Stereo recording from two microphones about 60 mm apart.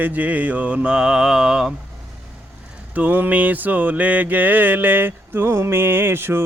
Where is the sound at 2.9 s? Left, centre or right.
Right.